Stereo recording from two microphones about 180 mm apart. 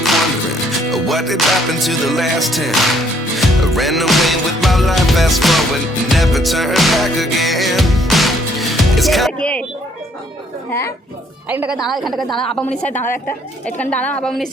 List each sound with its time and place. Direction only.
0.8 s music: centre (ahead or behind)
10.7 s speech: 15° left (ahead or behind)
11.4 s music: 10° right (ahead or behind)
12.8 s a woman's voice: 40° left (ahead or behind)
13.7 s a woman's voice: 5° left (ahead or behind)